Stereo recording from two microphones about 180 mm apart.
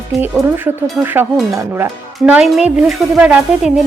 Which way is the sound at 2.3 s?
5° right (ahead or behind).